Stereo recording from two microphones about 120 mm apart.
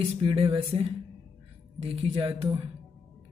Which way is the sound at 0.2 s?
50° right (ahead or behind).